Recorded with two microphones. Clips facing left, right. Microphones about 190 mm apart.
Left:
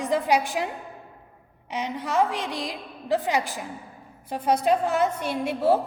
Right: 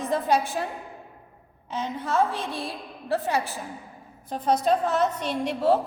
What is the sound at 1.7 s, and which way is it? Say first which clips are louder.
A woman's voice: even; 15° left (ahead or behind).